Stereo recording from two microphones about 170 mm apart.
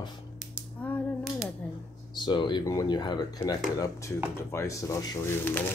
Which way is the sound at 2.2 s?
25° left (ahead or behind).